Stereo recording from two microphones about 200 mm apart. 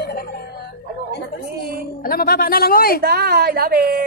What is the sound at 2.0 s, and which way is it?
Speech, 50° left (ahead or behind).